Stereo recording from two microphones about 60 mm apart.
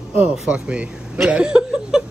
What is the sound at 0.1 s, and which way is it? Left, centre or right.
Speech, centre.